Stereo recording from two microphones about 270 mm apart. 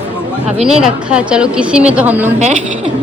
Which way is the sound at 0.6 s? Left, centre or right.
Centre.